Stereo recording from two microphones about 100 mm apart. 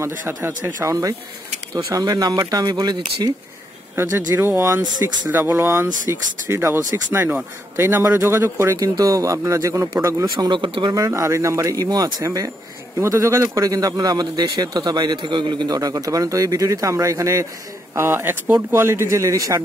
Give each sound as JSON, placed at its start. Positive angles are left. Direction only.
{"t": 0.0, "sound": "speech", "side_deg": -30}
{"t": 3.9, "sound": "speech", "side_deg": -25}
{"t": 8.7, "sound": "speech", "side_deg": -40}
{"t": 10.3, "sound": "speech", "side_deg": -50}
{"t": 11.1, "sound": "speech", "side_deg": -30}